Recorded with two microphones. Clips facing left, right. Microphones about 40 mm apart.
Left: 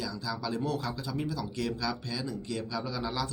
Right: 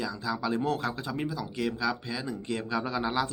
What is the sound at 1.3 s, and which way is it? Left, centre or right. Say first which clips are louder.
Speech: right 2 dB; centre.